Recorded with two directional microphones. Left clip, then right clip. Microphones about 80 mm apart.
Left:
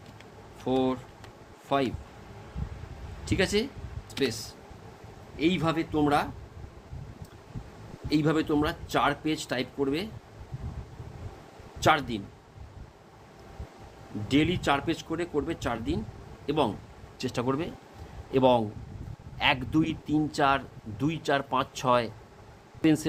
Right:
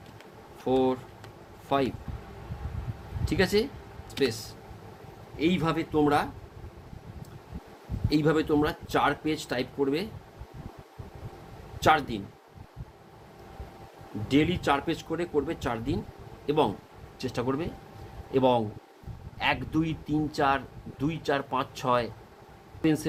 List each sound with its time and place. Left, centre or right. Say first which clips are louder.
0.6 s speech: right 2 dB; centre
3.2 s speech: right 2 dB; centre
5.4 s speech: even; centre
8.1 s speech: right 1 dB; centre
11.8 s speech: right 1 dB; centre
14.3 s speech: right 1 dB; centre
17.2 s speech: left 1 dB; left
19.7 s speech: left 2 dB; left